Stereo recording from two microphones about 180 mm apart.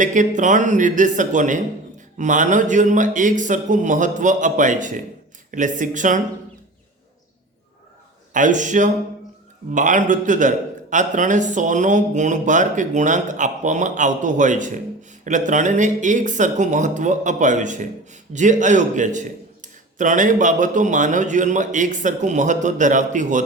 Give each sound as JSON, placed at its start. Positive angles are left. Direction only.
{"t": 0.0, "sound": "a man's voice", "side_deg": -45}
{"t": 8.3, "sound": "a man's voice", "side_deg": -45}